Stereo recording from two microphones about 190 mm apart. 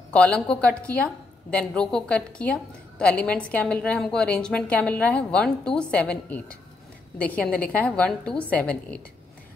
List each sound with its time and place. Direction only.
0.1 s a woman's voice: 5° left (ahead or behind)